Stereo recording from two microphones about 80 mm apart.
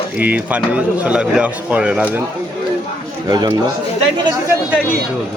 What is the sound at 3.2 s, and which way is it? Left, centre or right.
Speech, right.